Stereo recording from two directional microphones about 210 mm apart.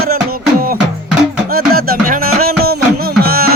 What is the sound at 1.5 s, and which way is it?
Music, 45° right (ahead or behind).